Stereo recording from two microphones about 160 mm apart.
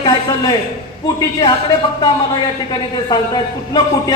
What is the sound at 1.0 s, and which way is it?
Speech, 25° left (ahead or behind).